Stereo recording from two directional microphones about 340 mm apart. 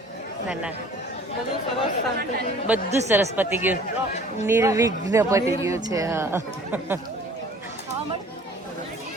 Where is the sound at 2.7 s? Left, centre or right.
Centre.